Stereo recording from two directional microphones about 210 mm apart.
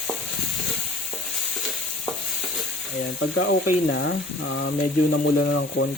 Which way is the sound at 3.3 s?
55° left (ahead or behind).